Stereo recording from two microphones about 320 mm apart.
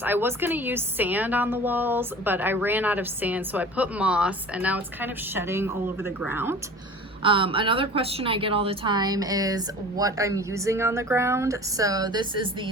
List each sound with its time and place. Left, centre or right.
0.0 s a woman's voice: centre